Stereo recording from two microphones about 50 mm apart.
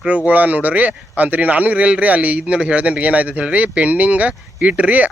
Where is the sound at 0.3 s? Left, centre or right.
Right.